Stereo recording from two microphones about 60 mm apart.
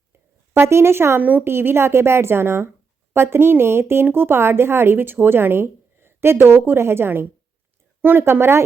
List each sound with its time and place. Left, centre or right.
0.6 s a woman's voice: right
1.2 s a woman's voice: right
1.5 s a woman's voice: right